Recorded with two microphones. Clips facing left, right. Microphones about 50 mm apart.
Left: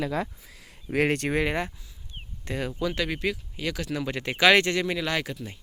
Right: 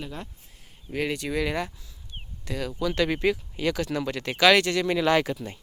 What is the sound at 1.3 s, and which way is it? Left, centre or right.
Speech, left.